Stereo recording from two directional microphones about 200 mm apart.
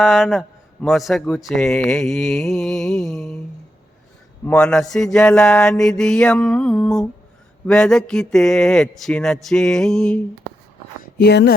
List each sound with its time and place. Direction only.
0.0 s a man's voice: centre (ahead or behind)
4.4 s a man's voice: 5° left (ahead or behind)
11.0 s speech: 55° left (ahead or behind)